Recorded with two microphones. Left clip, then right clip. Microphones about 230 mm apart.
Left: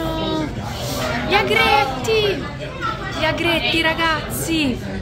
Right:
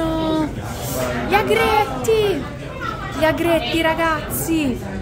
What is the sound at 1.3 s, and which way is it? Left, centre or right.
Speech, centre.